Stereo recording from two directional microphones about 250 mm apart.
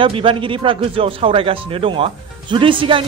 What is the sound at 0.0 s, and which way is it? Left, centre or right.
A man's voice, right.